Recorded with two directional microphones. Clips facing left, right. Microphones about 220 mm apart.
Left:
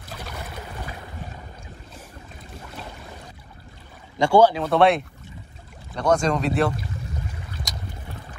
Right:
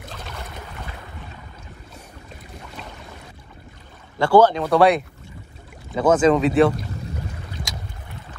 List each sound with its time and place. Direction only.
4.2 s speech: 10° left (ahead or behind)